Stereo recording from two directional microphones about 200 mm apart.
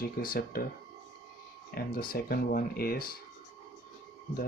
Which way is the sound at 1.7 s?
50° left (ahead or behind).